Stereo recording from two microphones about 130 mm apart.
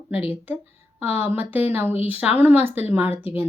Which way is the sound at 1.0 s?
15° right (ahead or behind).